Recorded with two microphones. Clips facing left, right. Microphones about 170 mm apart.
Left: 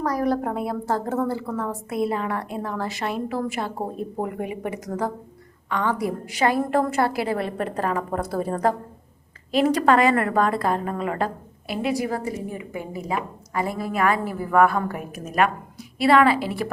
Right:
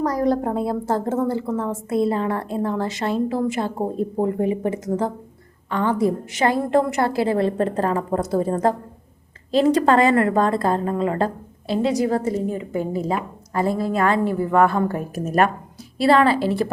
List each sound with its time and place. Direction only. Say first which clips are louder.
0.0 s a woman's voice: right 3 dB; 25° right (ahead or behind)